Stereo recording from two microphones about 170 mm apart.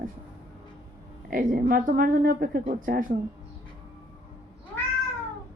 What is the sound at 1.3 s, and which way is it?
Speech, 55° right (ahead or behind).